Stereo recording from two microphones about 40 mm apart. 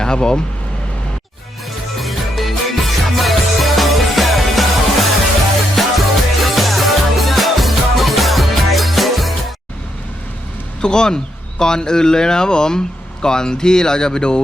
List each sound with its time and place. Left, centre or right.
0.0 s speech: centre
2.0 s music: centre
10.8 s speech: centre